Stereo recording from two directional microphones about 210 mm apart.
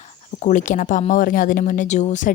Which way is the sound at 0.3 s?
35° left (ahead or behind).